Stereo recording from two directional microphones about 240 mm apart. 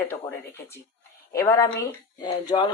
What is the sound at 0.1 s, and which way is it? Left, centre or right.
Speech, centre.